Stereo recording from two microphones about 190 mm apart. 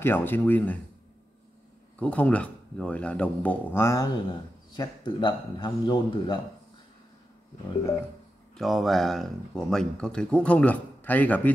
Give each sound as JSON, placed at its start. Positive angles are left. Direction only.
{"t": 0.0, "sound": "speech", "side_deg": 10}
{"t": 2.0, "sound": "speech", "side_deg": 5}
{"t": 8.5, "sound": "speech", "side_deg": 0}